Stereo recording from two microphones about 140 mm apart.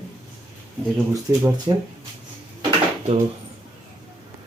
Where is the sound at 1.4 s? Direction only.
30° right (ahead or behind).